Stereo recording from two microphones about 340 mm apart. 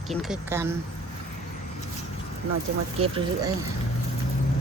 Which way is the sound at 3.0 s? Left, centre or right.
Centre.